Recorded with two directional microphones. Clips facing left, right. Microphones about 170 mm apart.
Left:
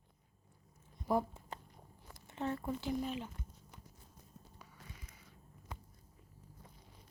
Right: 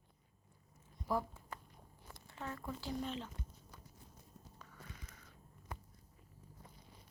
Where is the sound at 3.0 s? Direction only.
10° left (ahead or behind).